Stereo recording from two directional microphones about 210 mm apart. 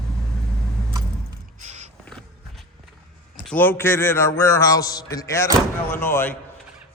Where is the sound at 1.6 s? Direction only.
35° right (ahead or behind).